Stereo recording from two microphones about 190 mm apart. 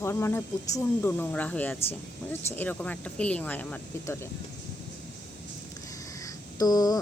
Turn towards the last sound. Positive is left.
turn(degrees=20)  # may be behind; listen again after turning